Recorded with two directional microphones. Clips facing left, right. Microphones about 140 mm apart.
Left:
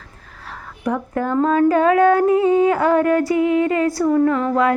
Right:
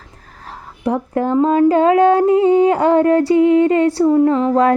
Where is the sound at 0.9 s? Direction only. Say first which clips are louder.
Right 4 dB; 30° right (ahead or behind).